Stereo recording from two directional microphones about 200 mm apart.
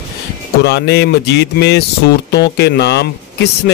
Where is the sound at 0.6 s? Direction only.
55° left (ahead or behind).